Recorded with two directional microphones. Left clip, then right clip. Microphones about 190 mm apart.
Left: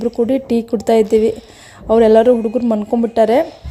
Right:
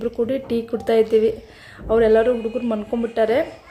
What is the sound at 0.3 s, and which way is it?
A woman's voice, 35° left (ahead or behind).